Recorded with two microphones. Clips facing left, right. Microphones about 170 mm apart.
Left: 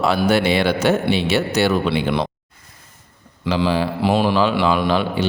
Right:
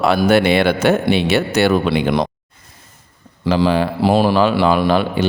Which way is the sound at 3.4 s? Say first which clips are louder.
Right 4 dB; 50° right (ahead or behind).